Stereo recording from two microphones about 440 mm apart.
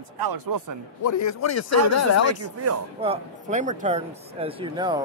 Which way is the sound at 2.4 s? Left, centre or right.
Right.